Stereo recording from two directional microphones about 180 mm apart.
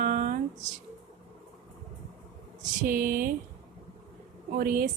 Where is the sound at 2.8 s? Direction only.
50° right (ahead or behind).